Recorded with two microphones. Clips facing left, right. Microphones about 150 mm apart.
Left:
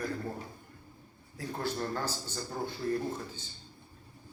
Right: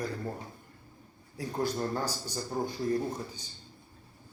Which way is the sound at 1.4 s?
15° right (ahead or behind).